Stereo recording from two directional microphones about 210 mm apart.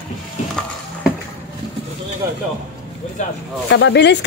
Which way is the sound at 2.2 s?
15° right (ahead or behind).